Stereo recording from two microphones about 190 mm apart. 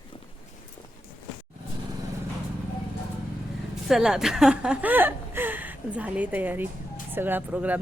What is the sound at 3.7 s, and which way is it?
Speech, centre (ahead or behind).